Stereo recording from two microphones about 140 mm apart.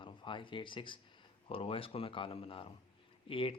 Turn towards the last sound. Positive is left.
turn(degrees=40)  # may be behind; listen again after turning